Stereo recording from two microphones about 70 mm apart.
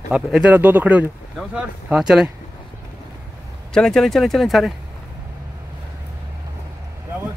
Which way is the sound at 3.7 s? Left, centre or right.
Centre.